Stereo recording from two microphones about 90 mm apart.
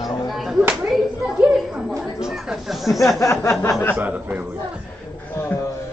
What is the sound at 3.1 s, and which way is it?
Speech, 35° left (ahead or behind).